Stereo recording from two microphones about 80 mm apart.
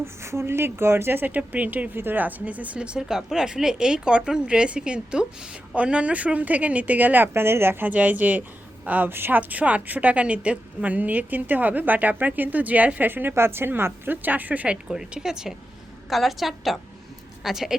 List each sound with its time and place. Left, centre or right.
0.0 s speech: right
14.8 s a woman's voice: centre